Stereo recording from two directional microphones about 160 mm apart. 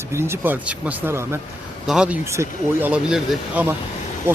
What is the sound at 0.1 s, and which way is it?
Speech, 15° right (ahead or behind).